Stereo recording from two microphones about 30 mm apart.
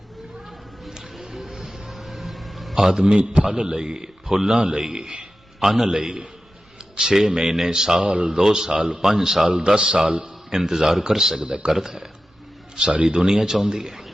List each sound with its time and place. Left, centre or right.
1.1 s music: centre
1.9 s a sound: centre
2.7 s a man's voice: centre
8.0 s speech: right
8.3 s a man's voice: centre
9.6 s a man's voice: right
10.5 s a man's voice: centre
11.3 s a man's voice: right